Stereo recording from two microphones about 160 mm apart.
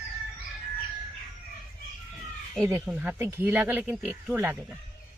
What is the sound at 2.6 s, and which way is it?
Speech, 10° right (ahead or behind).